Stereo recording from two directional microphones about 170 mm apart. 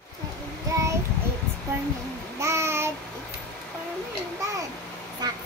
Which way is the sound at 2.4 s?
15° right (ahead or behind).